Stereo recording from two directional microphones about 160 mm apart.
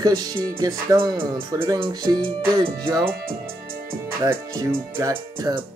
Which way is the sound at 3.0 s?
65° right (ahead or behind).